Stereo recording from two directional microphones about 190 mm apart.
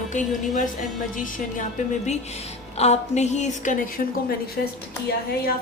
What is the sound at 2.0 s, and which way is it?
A woman's voice, 35° left (ahead or behind).